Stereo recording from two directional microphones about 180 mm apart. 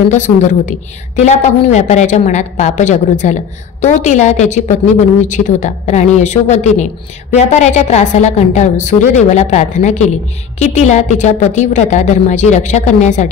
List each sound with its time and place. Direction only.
0.1 s a woman's voice: 40° left (ahead or behind)